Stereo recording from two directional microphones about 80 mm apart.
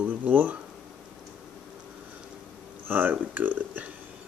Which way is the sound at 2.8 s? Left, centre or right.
Right.